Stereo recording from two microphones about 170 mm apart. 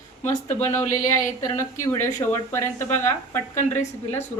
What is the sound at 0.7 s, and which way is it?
Speech, 20° left (ahead or behind).